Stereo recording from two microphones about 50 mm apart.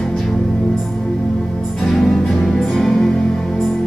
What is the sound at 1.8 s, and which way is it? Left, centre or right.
Music, centre.